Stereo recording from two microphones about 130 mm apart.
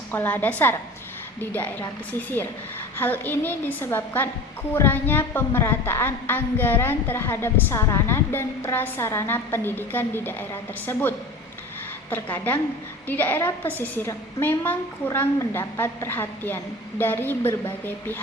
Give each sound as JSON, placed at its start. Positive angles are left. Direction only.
{"t": 0.1, "sound": "a woman's voice", "side_deg": 15}
{"t": 3.0, "sound": "a woman's voice", "side_deg": 15}
{"t": 12.1, "sound": "a woman's voice", "side_deg": 15}